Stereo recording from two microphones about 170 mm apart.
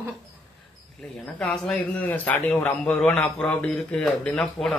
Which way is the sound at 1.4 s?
5° left (ahead or behind).